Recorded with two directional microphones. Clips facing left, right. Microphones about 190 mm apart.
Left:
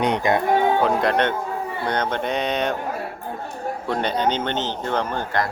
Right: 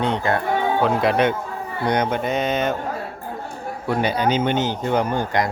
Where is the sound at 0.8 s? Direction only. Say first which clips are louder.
Right 1 dB; centre (ahead or behind).